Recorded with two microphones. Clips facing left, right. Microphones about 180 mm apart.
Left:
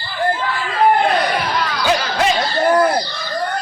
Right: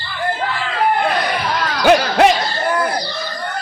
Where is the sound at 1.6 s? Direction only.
60° right (ahead or behind).